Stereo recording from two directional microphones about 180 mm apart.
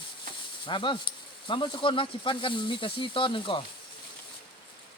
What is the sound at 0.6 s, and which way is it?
Speech, 25° left (ahead or behind).